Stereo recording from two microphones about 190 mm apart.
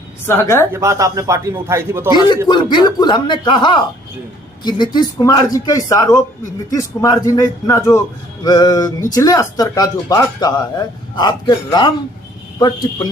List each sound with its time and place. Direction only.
0.3 s speech: 15° left (ahead or behind)
0.7 s a man's voice: 15° right (ahead or behind)
2.5 s speech: 25° left (ahead or behind)